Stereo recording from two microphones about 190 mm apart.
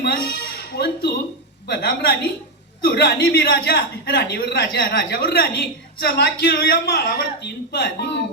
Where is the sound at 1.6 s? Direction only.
60° left (ahead or behind).